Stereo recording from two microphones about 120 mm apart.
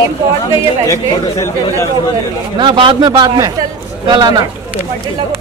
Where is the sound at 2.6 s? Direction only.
40° right (ahead or behind).